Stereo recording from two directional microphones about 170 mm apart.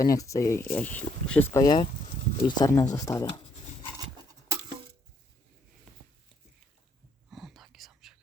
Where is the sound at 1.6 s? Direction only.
25° left (ahead or behind).